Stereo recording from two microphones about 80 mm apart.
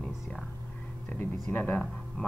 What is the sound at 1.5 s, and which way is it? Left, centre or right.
Speech, left.